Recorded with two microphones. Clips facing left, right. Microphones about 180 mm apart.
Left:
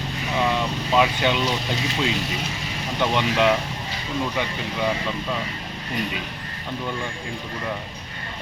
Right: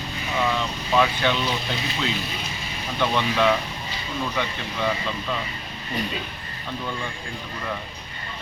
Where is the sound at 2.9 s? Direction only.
15° left (ahead or behind).